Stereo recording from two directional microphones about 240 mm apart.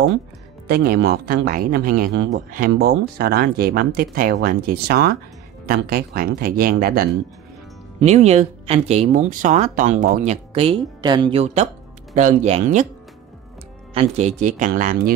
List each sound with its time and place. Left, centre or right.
0.7 s speech: right
8.0 s speech: right
13.9 s speech: right